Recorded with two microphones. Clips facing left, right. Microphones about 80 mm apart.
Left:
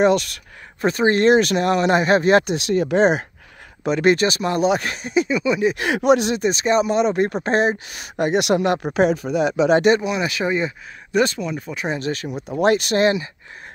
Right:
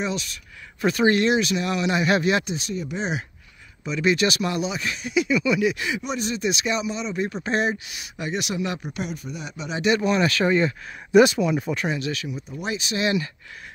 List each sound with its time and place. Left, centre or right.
0.0 s speech: left
0.7 s speech: left
1.2 s speech: left
2.5 s speech: left
3.8 s speech: left
4.2 s speech: left
4.6 s speech: left
5.8 s speech: left
6.4 s speech: left
10.0 s speech: centre
11.1 s speech: centre
11.9 s speech: left
12.3 s speech: left